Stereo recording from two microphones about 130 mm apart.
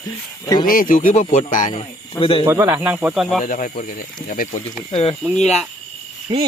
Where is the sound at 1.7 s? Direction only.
45° left (ahead or behind).